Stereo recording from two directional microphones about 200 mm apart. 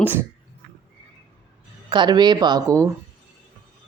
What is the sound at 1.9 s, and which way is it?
Speech, 20° right (ahead or behind).